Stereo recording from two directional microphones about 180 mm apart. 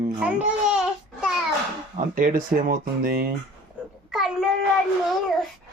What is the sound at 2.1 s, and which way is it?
Speech, 50° right (ahead or behind).